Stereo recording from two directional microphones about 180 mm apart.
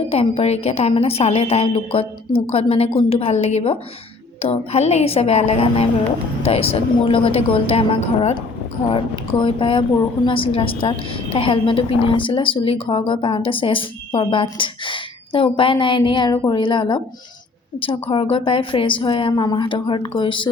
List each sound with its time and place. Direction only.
0.1 s a woman's voice: 35° left (ahead or behind)
18.1 s a woman's voice: 30° left (ahead or behind)